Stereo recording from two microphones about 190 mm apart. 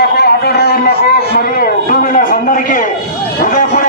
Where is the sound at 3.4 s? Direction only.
45° left (ahead or behind).